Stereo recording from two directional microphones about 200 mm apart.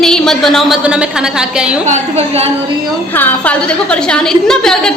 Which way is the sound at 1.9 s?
35° right (ahead or behind).